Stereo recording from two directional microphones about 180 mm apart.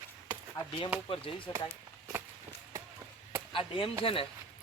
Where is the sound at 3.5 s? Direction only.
30° left (ahead or behind).